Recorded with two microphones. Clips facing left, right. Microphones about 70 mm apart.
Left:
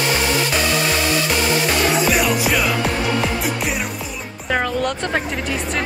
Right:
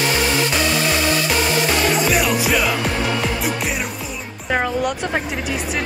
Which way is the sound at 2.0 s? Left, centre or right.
Centre.